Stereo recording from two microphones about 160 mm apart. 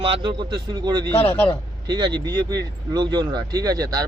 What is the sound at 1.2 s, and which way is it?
Speech, 10° left (ahead or behind).